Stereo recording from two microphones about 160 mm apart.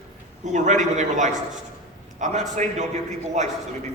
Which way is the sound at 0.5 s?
50° right (ahead or behind).